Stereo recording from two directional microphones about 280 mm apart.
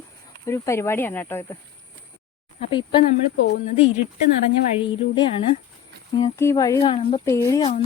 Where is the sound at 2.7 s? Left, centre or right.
Centre.